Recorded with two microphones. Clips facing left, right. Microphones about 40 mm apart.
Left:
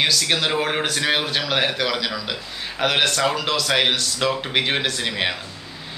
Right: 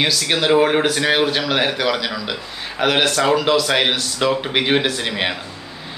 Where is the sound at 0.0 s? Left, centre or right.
Centre.